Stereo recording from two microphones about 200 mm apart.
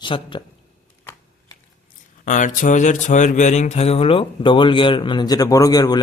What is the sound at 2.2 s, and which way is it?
Speech, 40° left (ahead or behind).